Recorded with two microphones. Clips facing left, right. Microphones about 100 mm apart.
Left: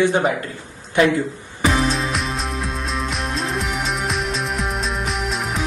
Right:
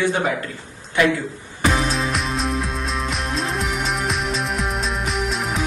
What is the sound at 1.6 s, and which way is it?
Music, centre (ahead or behind).